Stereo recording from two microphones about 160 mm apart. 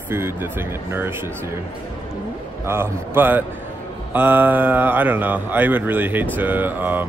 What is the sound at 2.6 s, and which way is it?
Speech, 15° right (ahead or behind).